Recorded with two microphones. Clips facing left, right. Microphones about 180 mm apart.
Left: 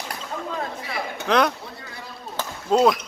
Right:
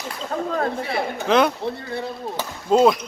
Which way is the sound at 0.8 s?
30° right (ahead or behind).